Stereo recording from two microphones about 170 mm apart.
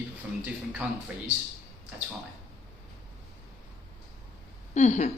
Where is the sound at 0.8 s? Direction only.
5° right (ahead or behind).